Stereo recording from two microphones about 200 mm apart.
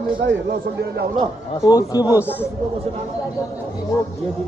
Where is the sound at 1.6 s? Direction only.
20° left (ahead or behind).